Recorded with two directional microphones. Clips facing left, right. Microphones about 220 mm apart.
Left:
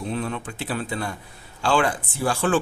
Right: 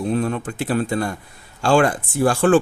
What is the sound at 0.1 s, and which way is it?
Speech, 45° right (ahead or behind).